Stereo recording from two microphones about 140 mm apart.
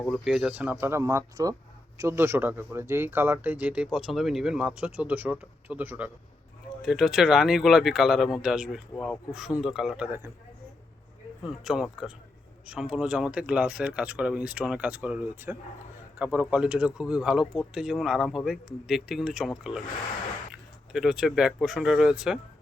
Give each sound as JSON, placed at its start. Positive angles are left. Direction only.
{"t": 0.1, "sound": "speech", "side_deg": -5}
{"t": 6.8, "sound": "speech", "side_deg": 0}
{"t": 11.4, "sound": "speech", "side_deg": -5}
{"t": 20.9, "sound": "speech", "side_deg": -5}